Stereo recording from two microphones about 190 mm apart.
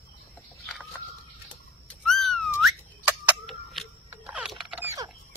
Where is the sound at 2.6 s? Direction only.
5° right (ahead or behind).